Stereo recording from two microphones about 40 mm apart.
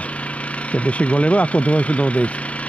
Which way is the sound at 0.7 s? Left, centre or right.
Left.